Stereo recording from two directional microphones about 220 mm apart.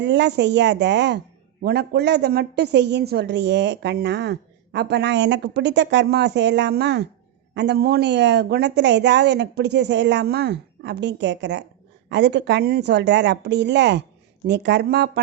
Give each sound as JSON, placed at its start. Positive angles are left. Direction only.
{"t": 0.0, "sound": "a woman's voice", "side_deg": -50}